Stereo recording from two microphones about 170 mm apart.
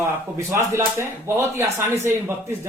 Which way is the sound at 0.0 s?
15° right (ahead or behind).